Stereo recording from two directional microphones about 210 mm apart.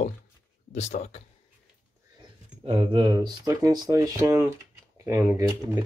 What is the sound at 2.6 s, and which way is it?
Speech, 20° right (ahead or behind).